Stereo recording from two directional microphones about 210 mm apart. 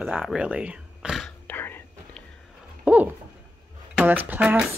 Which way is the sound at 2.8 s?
5° right (ahead or behind).